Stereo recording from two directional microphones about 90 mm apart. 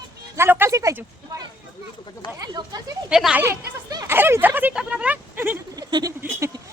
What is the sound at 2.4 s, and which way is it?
Speech, 45° right (ahead or behind).